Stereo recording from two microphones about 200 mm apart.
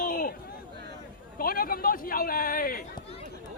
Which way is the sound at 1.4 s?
45° left (ahead or behind).